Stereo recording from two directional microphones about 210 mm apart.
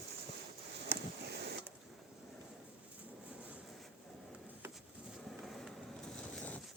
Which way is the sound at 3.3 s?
5° right (ahead or behind).